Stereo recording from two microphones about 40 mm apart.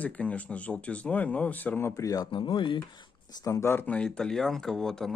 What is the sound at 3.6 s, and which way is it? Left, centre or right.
Speech, left.